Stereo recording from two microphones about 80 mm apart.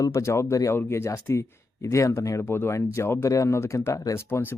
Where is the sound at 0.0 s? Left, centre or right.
Left.